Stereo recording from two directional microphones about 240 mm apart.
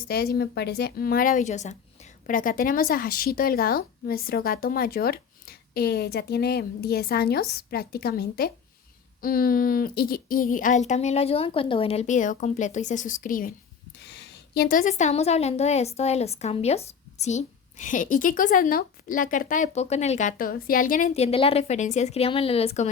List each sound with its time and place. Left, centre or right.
0.1 s a woman's voice: left
14.0 s a woman's voice: left